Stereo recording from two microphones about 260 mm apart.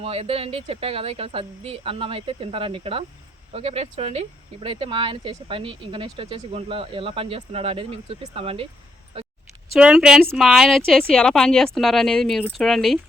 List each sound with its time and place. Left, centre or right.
0.0 s speech: right
9.7 s speech: centre